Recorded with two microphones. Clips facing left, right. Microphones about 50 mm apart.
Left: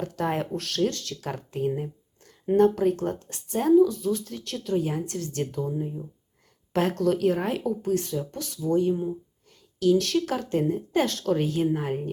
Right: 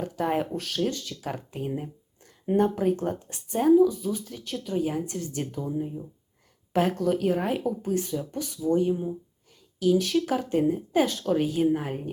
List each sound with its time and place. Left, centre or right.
0.0 s speech: centre
3.0 s speech: centre
5.0 s speech: centre
6.7 s speech: centre